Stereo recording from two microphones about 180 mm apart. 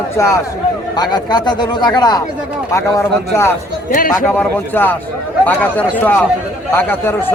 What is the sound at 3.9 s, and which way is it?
Speech, 50° left (ahead or behind).